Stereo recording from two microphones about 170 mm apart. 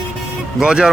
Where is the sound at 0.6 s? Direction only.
5° right (ahead or behind).